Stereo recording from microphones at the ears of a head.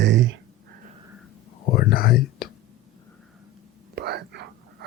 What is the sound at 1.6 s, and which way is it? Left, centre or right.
Whispering, left.